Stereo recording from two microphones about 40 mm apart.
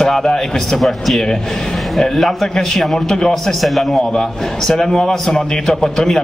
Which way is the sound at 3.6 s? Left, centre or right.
Centre.